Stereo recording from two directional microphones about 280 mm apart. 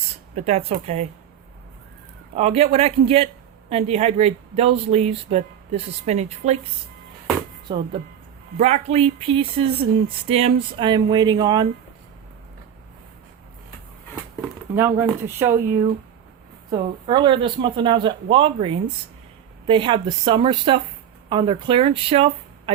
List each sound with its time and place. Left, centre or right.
0.3 s speech: right
2.3 s speech: right
7.7 s speech: centre
14.8 s speech: centre